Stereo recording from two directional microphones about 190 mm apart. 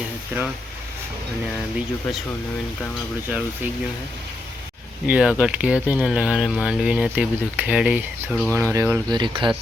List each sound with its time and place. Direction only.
3.2 s speech: 10° right (ahead or behind)
5.0 s speech: 5° right (ahead or behind)
8.5 s speech: 15° right (ahead or behind)